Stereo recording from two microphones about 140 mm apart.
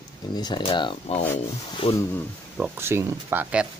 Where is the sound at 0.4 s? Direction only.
35° left (ahead or behind).